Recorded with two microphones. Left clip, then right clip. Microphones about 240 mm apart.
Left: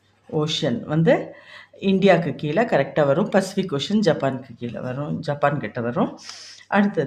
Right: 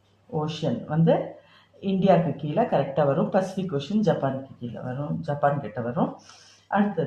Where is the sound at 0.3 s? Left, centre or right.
Left.